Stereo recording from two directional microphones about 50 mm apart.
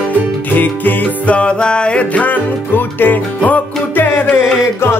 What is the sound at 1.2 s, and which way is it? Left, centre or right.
Music, left.